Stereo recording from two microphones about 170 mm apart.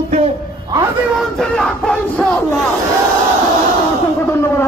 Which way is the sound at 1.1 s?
5° left (ahead or behind).